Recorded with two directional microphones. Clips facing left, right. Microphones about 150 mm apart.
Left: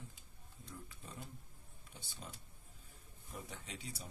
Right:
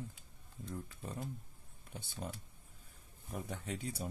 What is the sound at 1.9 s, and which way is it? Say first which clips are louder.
Speech: right 8 dB; 50° right (ahead or behind).